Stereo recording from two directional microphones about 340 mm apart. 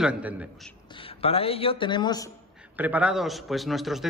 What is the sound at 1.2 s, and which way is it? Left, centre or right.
Speech, centre.